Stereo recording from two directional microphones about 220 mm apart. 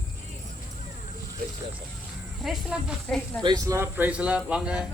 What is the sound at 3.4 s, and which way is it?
Speech, 15° right (ahead or behind).